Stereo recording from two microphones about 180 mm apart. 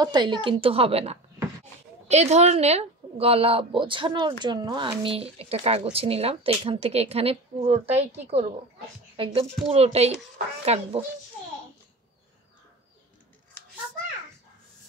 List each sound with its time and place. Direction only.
0.0 s a woman's voice: 25° right (ahead or behind)